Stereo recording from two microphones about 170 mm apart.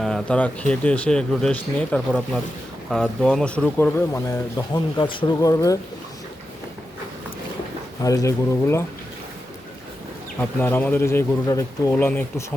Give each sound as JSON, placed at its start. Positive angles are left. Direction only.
{"t": 0.0, "sound": "speech", "side_deg": 5}
{"t": 8.0, "sound": "speech", "side_deg": 20}
{"t": 10.6, "sound": "speech", "side_deg": 10}